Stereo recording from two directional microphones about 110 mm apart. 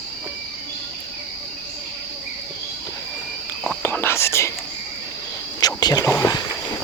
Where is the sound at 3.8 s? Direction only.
20° left (ahead or behind).